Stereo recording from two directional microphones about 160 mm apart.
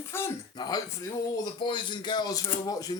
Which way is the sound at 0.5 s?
25° left (ahead or behind).